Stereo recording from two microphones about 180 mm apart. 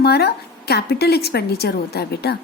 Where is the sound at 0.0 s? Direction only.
65° left (ahead or behind).